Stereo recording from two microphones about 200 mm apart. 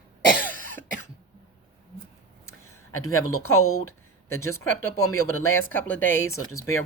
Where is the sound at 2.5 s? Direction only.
90° left.